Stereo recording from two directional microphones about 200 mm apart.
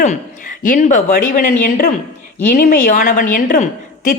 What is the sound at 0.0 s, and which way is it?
A woman's voice, 40° left (ahead or behind).